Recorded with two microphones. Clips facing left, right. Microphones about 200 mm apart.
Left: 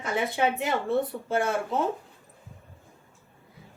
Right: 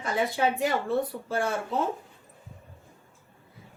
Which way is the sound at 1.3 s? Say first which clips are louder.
Left 3 dB; 20° left (ahead or behind).